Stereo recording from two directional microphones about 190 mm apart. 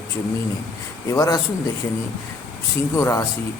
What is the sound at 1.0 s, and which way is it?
Speech, 15° left (ahead or behind).